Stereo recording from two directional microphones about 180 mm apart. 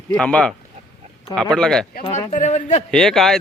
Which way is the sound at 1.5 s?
5° left (ahead or behind).